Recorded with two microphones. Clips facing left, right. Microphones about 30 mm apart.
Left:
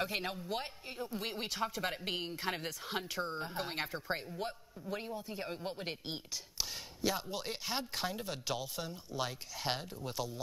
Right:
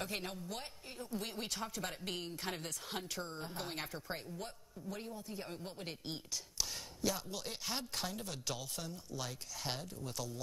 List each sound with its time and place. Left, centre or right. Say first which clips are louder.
0.0 s speech: left 5 dB; left